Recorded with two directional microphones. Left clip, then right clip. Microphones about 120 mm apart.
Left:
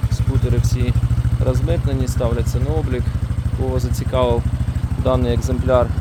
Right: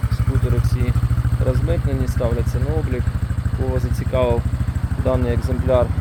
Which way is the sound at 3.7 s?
15° left (ahead or behind).